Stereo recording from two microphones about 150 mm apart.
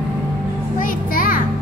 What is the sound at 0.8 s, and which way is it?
Speech, 65° left (ahead or behind).